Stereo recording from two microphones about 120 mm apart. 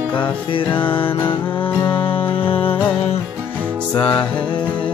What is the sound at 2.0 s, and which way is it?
Music, 50° left (ahead or behind).